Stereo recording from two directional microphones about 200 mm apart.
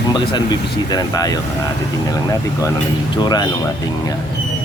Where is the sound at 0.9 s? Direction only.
20° left (ahead or behind).